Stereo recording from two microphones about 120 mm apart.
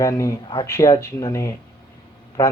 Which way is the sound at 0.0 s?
25° left (ahead or behind).